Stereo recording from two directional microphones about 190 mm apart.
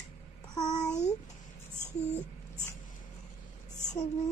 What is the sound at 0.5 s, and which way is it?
Speech, 20° left (ahead or behind).